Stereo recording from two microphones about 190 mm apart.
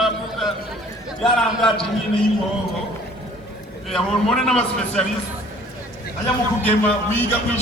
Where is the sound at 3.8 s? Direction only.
Centre (ahead or behind).